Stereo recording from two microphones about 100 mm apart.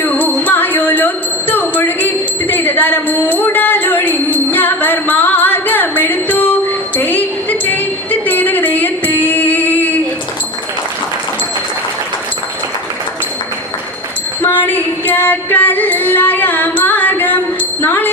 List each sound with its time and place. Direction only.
0.0 s music: 20° left (ahead or behind)
14.4 s music: 20° left (ahead or behind)